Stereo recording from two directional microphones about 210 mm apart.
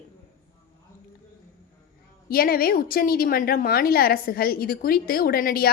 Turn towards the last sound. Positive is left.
turn(degrees=45)  # may be behind; listen again after turning